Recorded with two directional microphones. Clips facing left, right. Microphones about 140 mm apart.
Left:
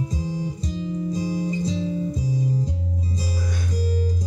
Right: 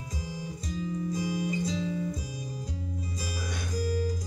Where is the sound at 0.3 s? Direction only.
30° left (ahead or behind).